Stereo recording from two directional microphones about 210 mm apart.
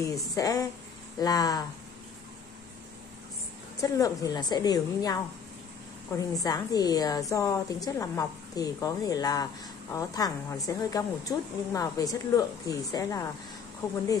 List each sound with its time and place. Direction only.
0.0 s a woman's voice: 15° left (ahead or behind)
3.8 s a woman's voice: 15° left (ahead or behind)